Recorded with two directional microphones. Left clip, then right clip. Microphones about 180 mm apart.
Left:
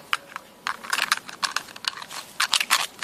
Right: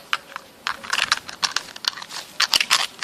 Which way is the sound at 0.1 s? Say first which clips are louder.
Right 2 dB; 15° left (ahead or behind).